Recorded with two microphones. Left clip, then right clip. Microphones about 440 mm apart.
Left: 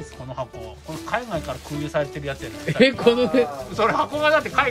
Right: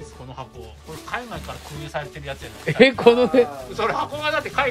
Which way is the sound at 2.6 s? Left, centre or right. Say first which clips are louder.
Right 3 dB; centre.